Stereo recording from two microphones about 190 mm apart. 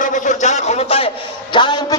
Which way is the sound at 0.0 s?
40° left (ahead or behind).